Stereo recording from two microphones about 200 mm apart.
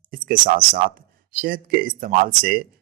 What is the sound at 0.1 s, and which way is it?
Speech, 45° right (ahead or behind).